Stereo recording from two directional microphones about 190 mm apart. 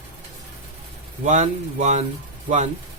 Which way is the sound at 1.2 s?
40° right (ahead or behind).